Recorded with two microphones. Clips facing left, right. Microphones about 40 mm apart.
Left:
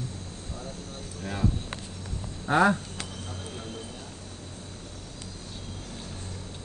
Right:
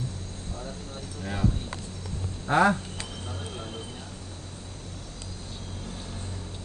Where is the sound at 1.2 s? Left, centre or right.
Centre.